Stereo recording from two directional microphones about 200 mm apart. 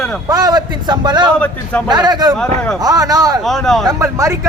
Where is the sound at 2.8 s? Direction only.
20° right (ahead or behind).